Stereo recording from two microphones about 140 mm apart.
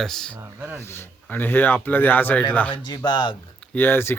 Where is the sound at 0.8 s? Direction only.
15° left (ahead or behind).